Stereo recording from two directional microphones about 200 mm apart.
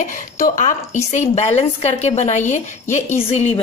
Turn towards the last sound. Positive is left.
turn(degrees=30)  # may be behind; listen again after turning